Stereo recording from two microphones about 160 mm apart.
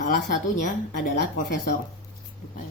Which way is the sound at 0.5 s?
60° left (ahead or behind).